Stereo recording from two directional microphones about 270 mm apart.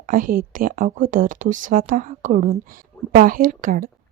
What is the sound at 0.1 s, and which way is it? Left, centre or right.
A woman's voice, right.